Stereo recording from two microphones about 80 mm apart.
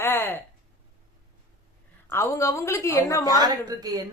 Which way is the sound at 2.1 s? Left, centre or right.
Left.